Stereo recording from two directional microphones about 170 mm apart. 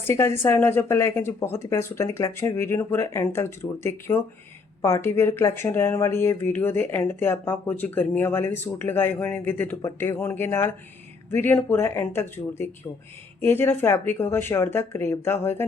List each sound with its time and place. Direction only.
0.0 s speech: 15° left (ahead or behind)